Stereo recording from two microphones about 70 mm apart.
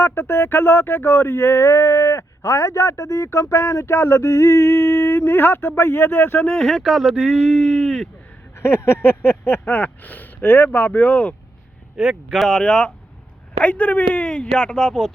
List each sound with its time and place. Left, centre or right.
0.0 s speech: left
6.6 s speech: centre
8.5 s a sound: left
11.9 s speech: centre
12.5 s speech: centre